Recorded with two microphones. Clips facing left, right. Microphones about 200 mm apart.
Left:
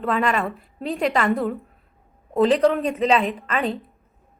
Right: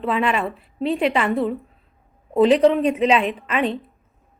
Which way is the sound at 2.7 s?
Centre (ahead or behind).